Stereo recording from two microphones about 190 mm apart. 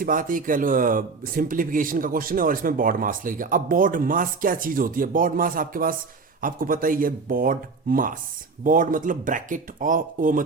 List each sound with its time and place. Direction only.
0.0 s speech: 45° right (ahead or behind)